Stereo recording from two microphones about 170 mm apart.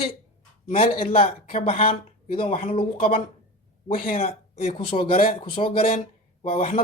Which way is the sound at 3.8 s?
50° left (ahead or behind).